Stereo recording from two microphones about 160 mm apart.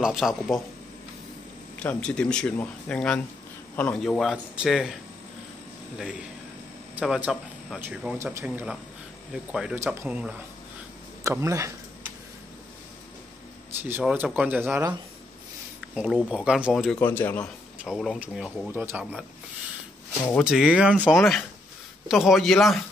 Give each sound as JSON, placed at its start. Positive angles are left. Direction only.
{"t": 0.0, "sound": "speech", "side_deg": 0}
{"t": 1.8, "sound": "speech", "side_deg": 5}
{"t": 7.0, "sound": "speech", "side_deg": -5}
{"t": 8.2, "sound": "speech", "side_deg": -15}
{"t": 8.5, "sound": "speech", "side_deg": -5}
{"t": 11.2, "sound": "speech", "side_deg": -20}
{"t": 14.1, "sound": "speech", "side_deg": -10}
{"t": 17.7, "sound": "speech", "side_deg": 0}
{"t": 20.3, "sound": "speech", "side_deg": -5}